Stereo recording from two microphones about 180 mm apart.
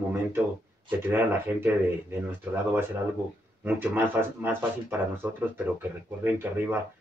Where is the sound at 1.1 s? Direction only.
10° right (ahead or behind).